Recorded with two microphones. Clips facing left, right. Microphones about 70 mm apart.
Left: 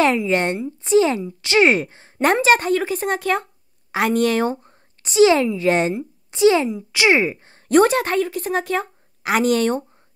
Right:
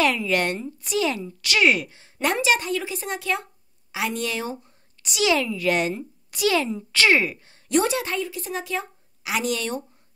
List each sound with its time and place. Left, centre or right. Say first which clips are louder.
0.0 s a woman's voice: left 4 dB; left
5.0 s a woman's voice: left 8 dB; left